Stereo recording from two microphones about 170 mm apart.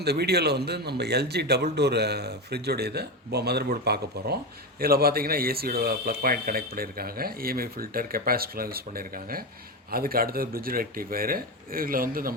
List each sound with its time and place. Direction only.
0.0 s speech: 70° right (ahead or behind)